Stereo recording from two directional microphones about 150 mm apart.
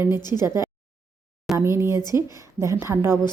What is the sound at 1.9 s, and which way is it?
Speech, 25° left (ahead or behind).